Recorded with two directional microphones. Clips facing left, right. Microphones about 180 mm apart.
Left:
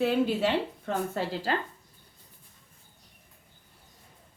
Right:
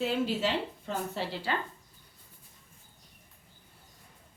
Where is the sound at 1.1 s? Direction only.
40° left (ahead or behind).